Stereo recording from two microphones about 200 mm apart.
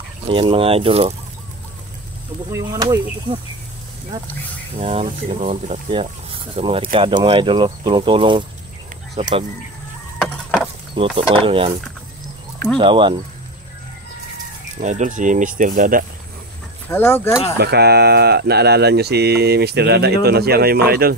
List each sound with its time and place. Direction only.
0.3 s speech: 25° right (ahead or behind)
2.5 s speech: 15° right (ahead or behind)
4.7 s speech: 35° right (ahead or behind)
10.2 s a sound: centre (ahead or behind)
11.0 s speech: 25° right (ahead or behind)
12.7 s speech: 25° right (ahead or behind)
14.8 s speech: 35° right (ahead or behind)
16.9 s speech: 10° left (ahead or behind)
17.6 s speech: 55° right (ahead or behind)